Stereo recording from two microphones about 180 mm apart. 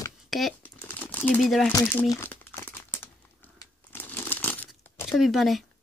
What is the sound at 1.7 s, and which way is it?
Crumpling, 15° left (ahead or behind).